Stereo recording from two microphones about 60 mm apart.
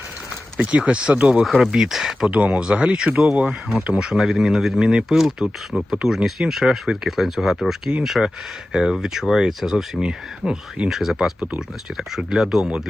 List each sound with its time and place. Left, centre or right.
0.6 s speech: centre
1.5 s speech: centre
2.3 s speech: centre
10.0 s speech: centre